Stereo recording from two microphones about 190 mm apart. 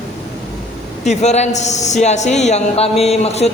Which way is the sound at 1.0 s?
35° left (ahead or behind).